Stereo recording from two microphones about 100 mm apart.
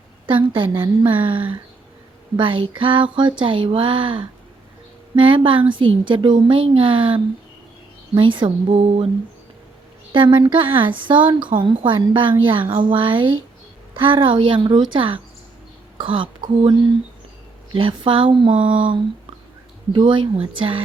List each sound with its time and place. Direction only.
0.3 s a woman's voice: 60° right (ahead or behind)
8.7 s mantra: 80° right
10.1 s a woman's voice: 55° right (ahead or behind)
17.7 s a woman's voice: 60° right (ahead or behind)